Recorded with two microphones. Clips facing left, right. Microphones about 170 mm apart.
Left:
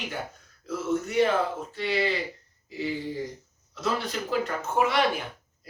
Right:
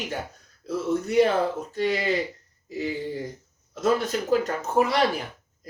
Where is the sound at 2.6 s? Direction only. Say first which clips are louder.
Right 2 dB; 45° right (ahead or behind).